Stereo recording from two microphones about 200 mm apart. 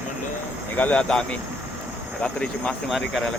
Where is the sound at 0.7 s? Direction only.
10° left (ahead or behind).